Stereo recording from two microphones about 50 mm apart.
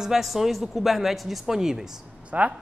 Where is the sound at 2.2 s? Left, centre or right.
Right.